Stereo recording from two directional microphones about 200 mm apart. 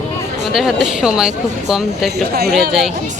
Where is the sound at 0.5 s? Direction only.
5° right (ahead or behind).